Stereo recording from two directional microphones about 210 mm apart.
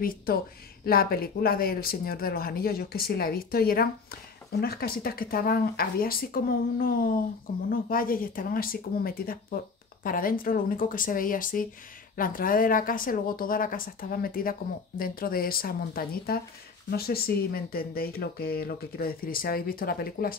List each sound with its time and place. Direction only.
0.0 s a woman's voice: 45° left (ahead or behind)